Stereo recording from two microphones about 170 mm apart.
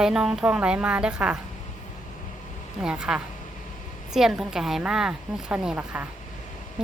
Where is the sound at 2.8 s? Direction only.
5° right (ahead or behind).